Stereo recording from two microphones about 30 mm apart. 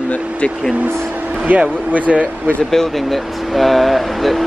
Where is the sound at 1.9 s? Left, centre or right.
Right.